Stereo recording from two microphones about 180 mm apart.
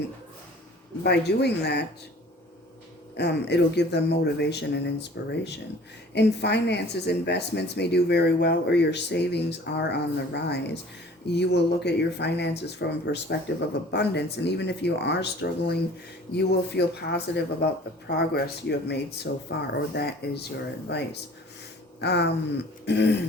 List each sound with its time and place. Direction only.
1.0 s speech: 65° left (ahead or behind)
3.2 s speech: 70° left (ahead or behind)